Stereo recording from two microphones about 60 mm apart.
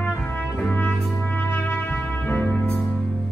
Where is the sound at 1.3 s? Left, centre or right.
Left.